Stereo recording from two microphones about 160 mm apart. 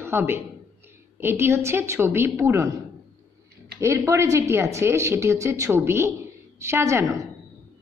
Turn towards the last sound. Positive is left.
turn(degrees=-20)  # may be behind; listen again after turning